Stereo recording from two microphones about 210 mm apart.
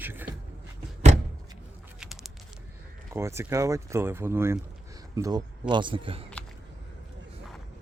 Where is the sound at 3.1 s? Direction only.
10° right (ahead or behind).